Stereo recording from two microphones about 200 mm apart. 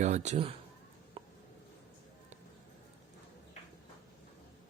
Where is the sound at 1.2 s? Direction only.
30° right (ahead or behind).